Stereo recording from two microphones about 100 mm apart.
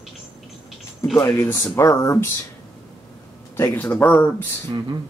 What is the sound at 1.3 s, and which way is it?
Speech, 20° left (ahead or behind).